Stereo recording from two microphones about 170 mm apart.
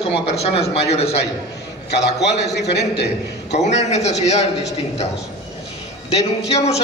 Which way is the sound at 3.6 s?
40° left (ahead or behind).